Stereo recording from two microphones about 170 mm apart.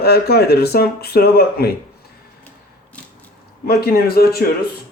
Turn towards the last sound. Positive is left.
turn(degrees=65)  # may be behind; listen again after turning